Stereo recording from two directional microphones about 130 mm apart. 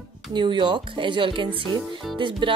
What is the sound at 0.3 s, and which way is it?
Speech, 35° right (ahead or behind).